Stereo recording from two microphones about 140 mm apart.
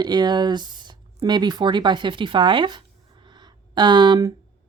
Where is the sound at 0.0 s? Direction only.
30° right (ahead or behind).